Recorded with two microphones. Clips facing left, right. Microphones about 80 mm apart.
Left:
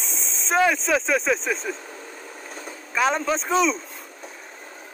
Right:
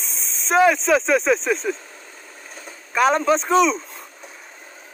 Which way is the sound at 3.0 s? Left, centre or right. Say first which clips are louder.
Right 5 dB; centre.